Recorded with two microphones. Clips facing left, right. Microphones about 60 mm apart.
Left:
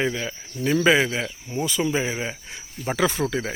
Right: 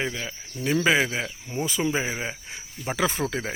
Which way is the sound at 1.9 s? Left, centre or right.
Centre.